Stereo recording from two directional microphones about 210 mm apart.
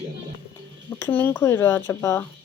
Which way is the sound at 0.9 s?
10° left (ahead or behind).